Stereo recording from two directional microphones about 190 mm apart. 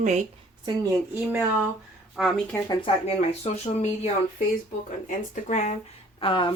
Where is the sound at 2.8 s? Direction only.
35° left (ahead or behind).